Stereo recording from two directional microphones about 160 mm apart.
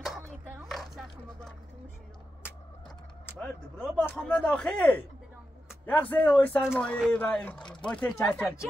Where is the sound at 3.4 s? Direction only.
5° left (ahead or behind).